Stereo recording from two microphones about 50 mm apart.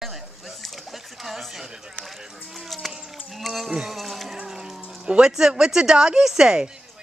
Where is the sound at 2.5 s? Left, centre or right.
Centre.